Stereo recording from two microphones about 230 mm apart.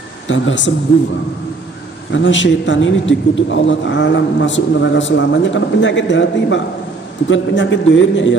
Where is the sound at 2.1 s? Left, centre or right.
Left.